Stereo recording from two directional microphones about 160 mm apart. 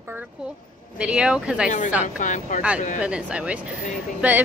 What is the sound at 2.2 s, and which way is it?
Speech, 50° left (ahead or behind).